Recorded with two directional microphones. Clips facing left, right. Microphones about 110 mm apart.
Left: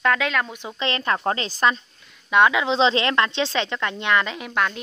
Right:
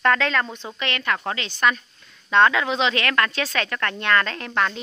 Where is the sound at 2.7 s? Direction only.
25° left (ahead or behind).